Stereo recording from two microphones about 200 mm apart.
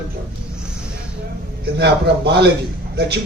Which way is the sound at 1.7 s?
55° right (ahead or behind).